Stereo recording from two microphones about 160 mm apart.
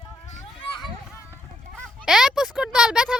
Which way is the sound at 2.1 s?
5° right (ahead or behind).